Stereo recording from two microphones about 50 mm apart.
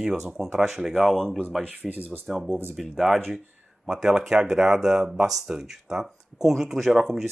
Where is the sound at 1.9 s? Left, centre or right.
Right.